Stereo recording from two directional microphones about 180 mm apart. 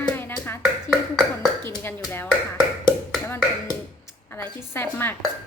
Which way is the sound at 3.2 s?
15° left (ahead or behind).